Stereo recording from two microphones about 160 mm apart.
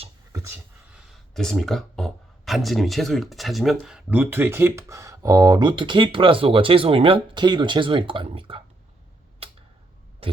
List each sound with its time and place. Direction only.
1.0 s speech: centre (ahead or behind); by 8.6 s 35° right (ahead or behind)